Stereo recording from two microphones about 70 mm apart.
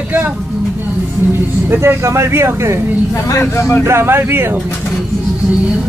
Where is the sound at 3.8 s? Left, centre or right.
Right.